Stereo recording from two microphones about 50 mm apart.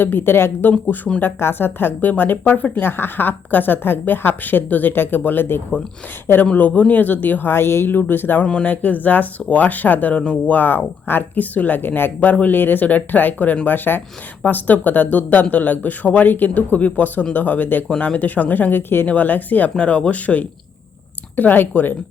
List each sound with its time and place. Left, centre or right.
0.0 s speech: left
0.6 s speech: left
6.4 s speech: left
7.9 s speech: left
19.0 s speech: left
19.7 s speech: left